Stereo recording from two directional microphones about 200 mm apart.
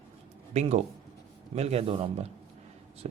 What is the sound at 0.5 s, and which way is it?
Speech, 35° right (ahead or behind).